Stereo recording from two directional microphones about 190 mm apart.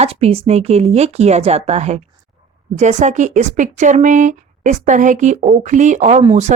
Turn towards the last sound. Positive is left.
turn(degrees=-35)  # may be behind; listen again after turning